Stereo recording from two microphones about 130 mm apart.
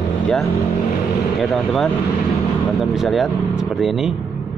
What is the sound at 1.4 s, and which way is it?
Speech, centre (ahead or behind).